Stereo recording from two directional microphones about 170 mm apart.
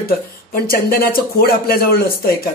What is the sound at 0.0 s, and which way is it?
Speech, 60° left (ahead or behind).